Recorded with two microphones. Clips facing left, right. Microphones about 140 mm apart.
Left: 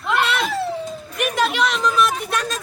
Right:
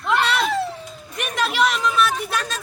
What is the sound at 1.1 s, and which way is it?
Speech, centre (ahead or behind).